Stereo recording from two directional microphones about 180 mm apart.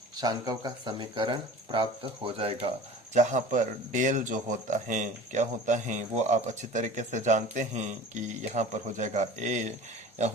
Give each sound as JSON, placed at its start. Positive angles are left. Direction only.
{"t": 0.2, "sound": "speech", "side_deg": -20}
{"t": 3.2, "sound": "speech", "side_deg": -45}